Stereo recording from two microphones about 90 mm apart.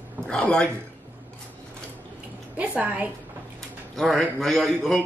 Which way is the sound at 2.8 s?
15° right (ahead or behind).